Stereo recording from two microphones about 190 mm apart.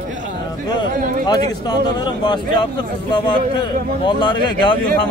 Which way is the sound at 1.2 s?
20° left (ahead or behind).